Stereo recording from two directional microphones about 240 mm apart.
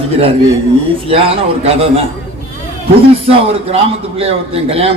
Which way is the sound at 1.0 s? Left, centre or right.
Right.